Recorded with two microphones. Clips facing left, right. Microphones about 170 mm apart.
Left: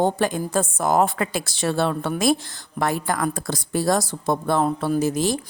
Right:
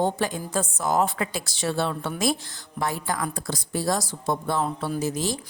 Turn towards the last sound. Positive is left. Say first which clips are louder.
# left 6 dB
turn(degrees=60)  # may be behind; listen again after turning